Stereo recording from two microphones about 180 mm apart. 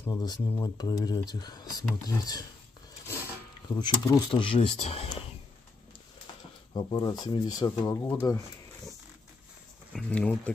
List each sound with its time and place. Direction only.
0.0 s speech: 20° left (ahead or behind)
3.6 s speech: 25° left (ahead or behind)
6.7 s speech: 25° left (ahead or behind)
9.9 s speech: 5° left (ahead or behind)